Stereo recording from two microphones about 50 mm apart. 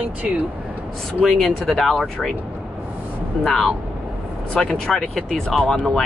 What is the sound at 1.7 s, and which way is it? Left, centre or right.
Speech, centre.